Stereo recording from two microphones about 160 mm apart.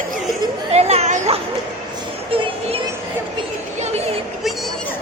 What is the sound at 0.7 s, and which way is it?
Children playing, 40° right (ahead or behind).